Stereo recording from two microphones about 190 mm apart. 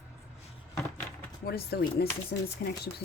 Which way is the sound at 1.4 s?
55° left (ahead or behind).